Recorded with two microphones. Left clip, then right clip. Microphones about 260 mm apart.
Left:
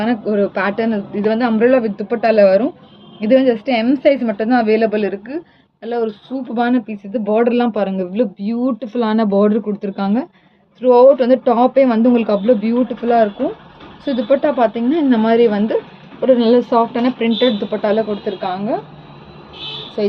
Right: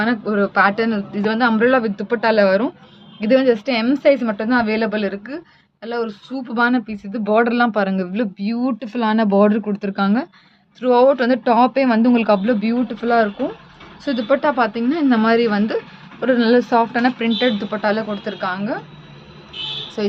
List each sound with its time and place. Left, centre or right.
0.0 s speech: right
20.0 s speech: right